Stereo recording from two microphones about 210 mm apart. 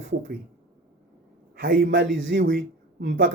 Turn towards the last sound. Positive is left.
turn(degrees=-55)  # may be behind; listen again after turning